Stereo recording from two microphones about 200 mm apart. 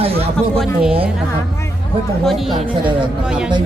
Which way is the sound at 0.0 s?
30° right (ahead or behind).